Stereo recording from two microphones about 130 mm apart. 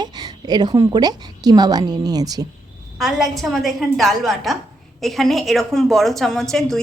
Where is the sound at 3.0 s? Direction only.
Centre (ahead or behind).